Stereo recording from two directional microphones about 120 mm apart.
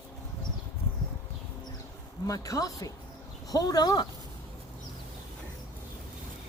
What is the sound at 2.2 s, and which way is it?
Speech, 30° left (ahead or behind).